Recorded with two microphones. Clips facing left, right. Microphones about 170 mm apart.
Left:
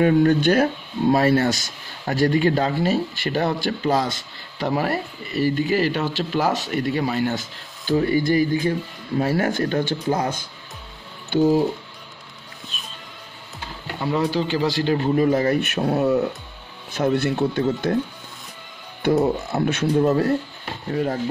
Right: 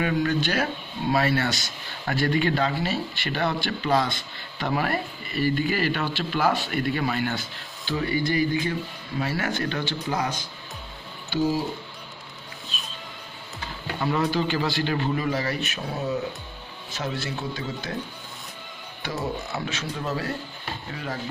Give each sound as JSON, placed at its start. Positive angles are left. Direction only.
{"t": 0.0, "sound": "speech", "side_deg": 45}
{"t": 14.0, "sound": "speech", "side_deg": 25}
{"t": 17.9, "sound": "speech", "side_deg": 45}
{"t": 19.2, "sound": "speech", "side_deg": 50}